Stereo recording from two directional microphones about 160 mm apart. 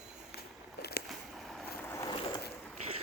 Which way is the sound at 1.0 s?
Centre (ahead or behind).